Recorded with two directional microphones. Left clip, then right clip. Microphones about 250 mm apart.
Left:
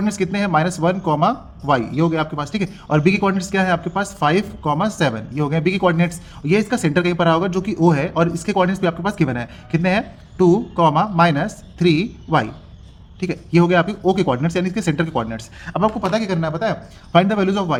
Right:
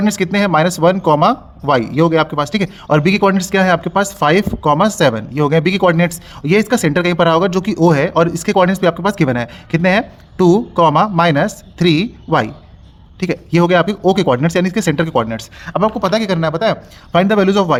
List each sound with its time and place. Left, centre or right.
0.0 s speech: right